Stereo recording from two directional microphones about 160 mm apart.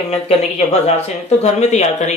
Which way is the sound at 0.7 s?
45° left (ahead or behind).